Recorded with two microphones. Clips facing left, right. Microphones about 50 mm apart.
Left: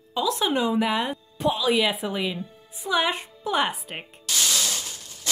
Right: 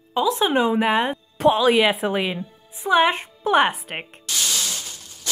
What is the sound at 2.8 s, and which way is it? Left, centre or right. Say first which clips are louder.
Speech: right 6 dB; right.